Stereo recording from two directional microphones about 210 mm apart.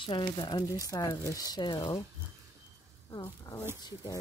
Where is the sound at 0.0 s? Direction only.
25° left (ahead or behind).